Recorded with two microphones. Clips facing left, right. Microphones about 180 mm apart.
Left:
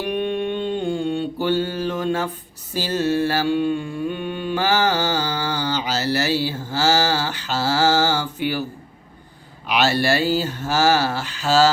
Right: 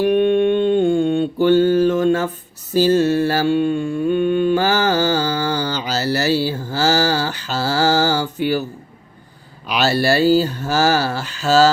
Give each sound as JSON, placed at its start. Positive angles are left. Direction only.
{"t": 0.0, "sound": "mantra", "side_deg": -50}
{"t": 9.6, "sound": "speech", "side_deg": -40}